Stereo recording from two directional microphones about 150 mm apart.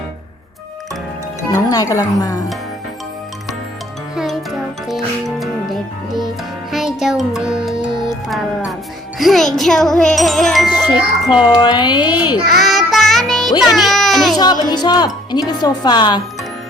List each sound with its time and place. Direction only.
1.5 s speech: 20° left (ahead or behind)
4.1 s music: 5° right (ahead or behind)
7.9 s music: 30° right (ahead or behind)
9.1 s music: centre (ahead or behind)
10.9 s wind chime: 5° right (ahead or behind)
11.6 s a woman's voice: 30° left (ahead or behind)
12.5 s music: centre (ahead or behind)
13.6 s a child's voice: centre (ahead or behind)
14.3 s a woman's voice: 25° left (ahead or behind)